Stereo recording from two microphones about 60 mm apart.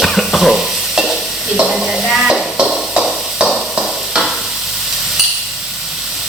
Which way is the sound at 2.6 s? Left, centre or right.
Centre.